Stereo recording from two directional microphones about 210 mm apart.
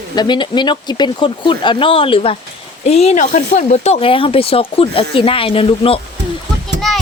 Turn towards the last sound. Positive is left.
turn(degrees=0)  # may be behind; listen again after turning